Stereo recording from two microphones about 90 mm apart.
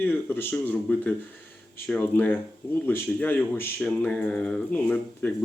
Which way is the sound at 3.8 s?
15° left (ahead or behind).